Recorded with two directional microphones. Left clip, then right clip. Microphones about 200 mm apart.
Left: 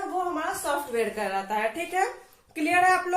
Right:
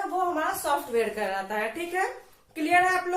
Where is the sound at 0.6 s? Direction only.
15° left (ahead or behind).